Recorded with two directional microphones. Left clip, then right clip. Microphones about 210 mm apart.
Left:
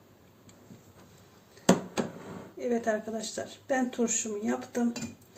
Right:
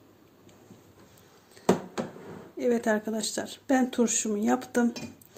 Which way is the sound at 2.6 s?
55° right (ahead or behind).